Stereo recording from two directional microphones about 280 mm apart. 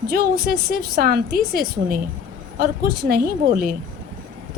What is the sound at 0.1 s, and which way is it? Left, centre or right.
A woman's voice, right.